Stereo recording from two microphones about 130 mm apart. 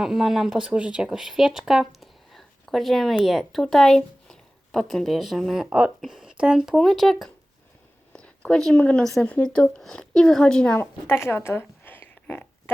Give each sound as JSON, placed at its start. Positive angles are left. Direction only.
{"t": 0.0, "sound": "a woman's voice", "side_deg": -5}
{"t": 10.8, "sound": "a woman's voice", "side_deg": 20}